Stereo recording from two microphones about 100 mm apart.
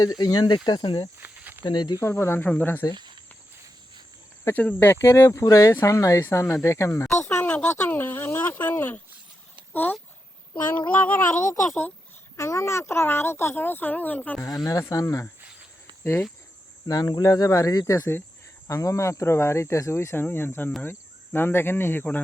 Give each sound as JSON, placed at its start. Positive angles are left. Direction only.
{"t": 0.0, "sound": "speech", "side_deg": 40}
{"t": 1.2, "sound": "snake", "side_deg": -20}
{"t": 1.6, "sound": "speech", "side_deg": 45}
{"t": 2.0, "sound": "speech", "side_deg": 25}
{"t": 2.9, "sound": "cricket", "side_deg": -50}
{"t": 4.4, "sound": "speech", "side_deg": 20}
{"t": 9.7, "sound": "female singing", "side_deg": 15}
{"t": 12.4, "sound": "speech", "side_deg": 30}
{"t": 14.4, "sound": "speech", "side_deg": 35}
{"t": 16.8, "sound": "speech", "side_deg": 40}